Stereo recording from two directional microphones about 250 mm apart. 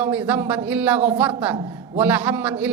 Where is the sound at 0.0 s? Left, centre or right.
Centre.